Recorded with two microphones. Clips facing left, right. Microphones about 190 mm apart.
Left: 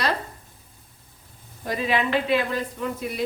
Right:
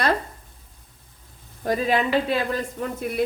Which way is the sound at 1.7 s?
45° right (ahead or behind).